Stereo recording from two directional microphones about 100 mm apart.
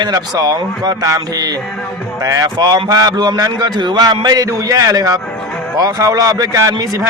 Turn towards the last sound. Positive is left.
turn(degrees=-35)  # may be behind; listen again after turning